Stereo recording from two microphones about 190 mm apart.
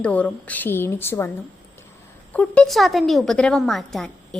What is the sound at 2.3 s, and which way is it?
A woman's voice, 5° left (ahead or behind).